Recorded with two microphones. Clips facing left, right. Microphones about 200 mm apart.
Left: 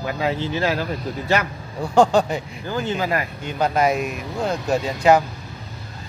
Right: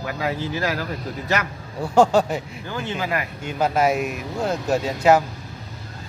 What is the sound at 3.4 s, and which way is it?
Speech, 5° right (ahead or behind).